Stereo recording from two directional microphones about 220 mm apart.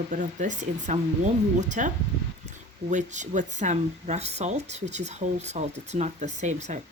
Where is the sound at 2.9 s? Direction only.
35° right (ahead or behind).